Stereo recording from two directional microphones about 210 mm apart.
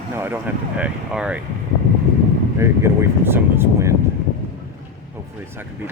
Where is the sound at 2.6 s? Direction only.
10° right (ahead or behind).